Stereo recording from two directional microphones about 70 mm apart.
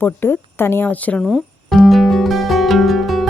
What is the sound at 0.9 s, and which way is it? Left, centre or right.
Speech, left.